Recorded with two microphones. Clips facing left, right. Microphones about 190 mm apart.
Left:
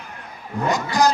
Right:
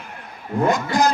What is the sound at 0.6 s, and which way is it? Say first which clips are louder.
Speech: even; 55° right (ahead or behind).